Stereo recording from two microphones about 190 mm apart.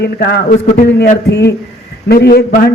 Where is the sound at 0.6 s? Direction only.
40° left (ahead or behind).